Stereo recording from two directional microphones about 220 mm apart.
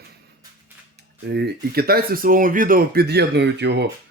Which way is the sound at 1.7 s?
45° right (ahead or behind).